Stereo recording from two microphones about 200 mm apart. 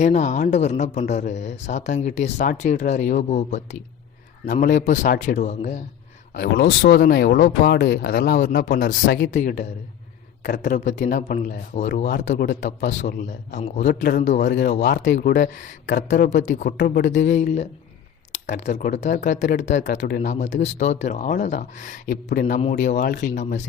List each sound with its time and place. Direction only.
0.0 s speech: 35° left (ahead or behind)
6.4 s speech: 55° left (ahead or behind)
14.4 s speech: 60° left (ahead or behind); by 16.7 s 40° left (ahead or behind)
16.7 s speech: 50° left (ahead or behind)
17.2 s speech: 35° left (ahead or behind)